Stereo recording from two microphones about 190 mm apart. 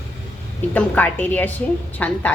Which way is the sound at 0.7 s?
10° left (ahead or behind).